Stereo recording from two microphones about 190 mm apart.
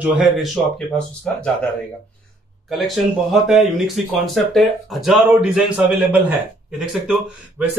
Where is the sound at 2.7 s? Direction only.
Centre (ahead or behind).